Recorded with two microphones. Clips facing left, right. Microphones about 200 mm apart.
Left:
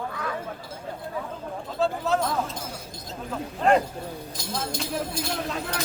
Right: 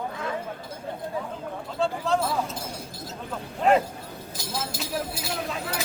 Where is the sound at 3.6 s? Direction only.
5° right (ahead or behind).